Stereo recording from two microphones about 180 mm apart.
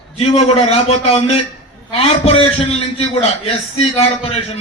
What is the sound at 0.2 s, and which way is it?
A man's voice, 35° left (ahead or behind).